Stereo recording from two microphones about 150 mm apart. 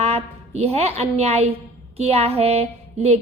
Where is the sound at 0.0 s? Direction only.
45° right (ahead or behind).